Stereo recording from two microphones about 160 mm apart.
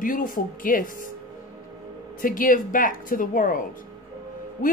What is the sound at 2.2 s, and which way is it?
A woman's voice, 60° left (ahead or behind).